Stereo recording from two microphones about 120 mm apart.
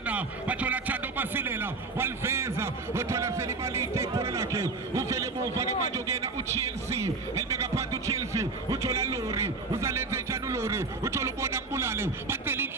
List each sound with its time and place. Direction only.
0.0 s music: 10° right (ahead or behind)